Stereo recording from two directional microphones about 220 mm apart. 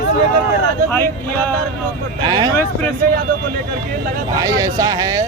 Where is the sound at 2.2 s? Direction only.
20° right (ahead or behind).